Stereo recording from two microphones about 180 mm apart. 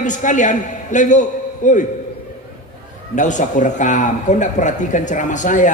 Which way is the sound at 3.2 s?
45° left (ahead or behind).